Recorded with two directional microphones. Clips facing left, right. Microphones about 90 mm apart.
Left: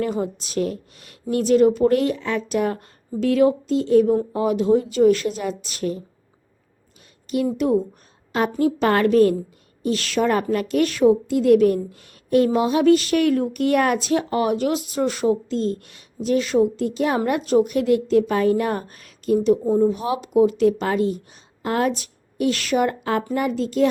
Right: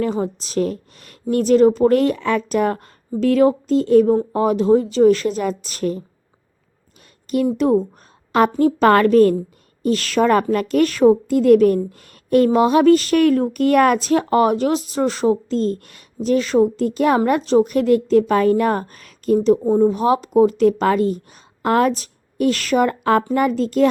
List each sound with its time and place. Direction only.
0.0 s a woman's voice: 35° right (ahead or behind)
7.5 s a woman's voice: 35° right (ahead or behind)
17.4 s a woman's voice: 35° right (ahead or behind); by 21.9 s 55° right (ahead or behind)
21.9 s a woman's voice: 40° right (ahead or behind)